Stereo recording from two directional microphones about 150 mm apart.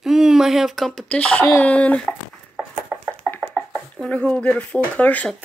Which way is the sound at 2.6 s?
10° right (ahead or behind).